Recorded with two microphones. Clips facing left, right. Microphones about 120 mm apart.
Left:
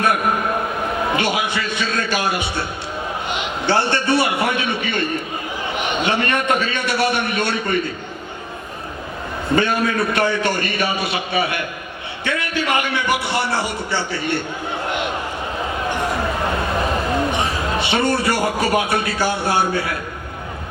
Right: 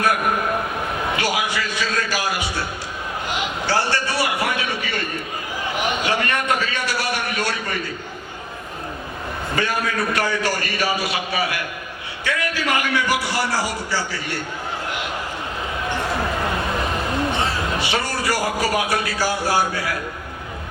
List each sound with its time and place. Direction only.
1.1 s a sound: 25° left (ahead or behind)
3.7 s a man's voice: 25° left (ahead or behind)
9.6 s a man's voice: 25° left (ahead or behind)
17.3 s a man's voice: 20° left (ahead or behind)